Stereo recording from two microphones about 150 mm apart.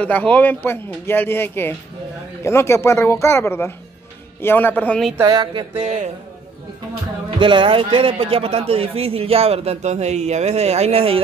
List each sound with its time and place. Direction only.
0.0 s speech: 10° left (ahead or behind)
5.2 s a man's voice: 30° right (ahead or behind)
7.2 s a man's voice: 35° right (ahead or behind)